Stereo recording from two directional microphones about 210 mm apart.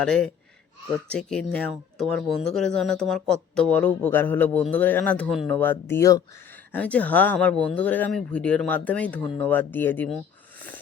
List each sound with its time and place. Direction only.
0.0 s speech: 5° left (ahead or behind)